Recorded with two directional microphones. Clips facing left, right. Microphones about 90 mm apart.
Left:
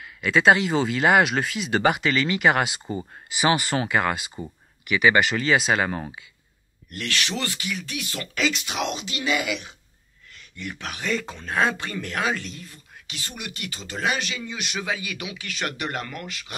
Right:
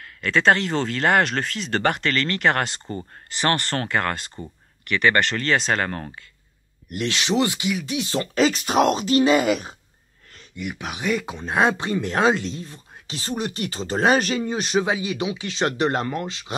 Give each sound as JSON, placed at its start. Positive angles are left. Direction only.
{"t": 0.0, "sound": "speech", "side_deg": 5}
{"t": 6.9, "sound": "speech", "side_deg": -20}
{"t": 10.5, "sound": "speech", "side_deg": -10}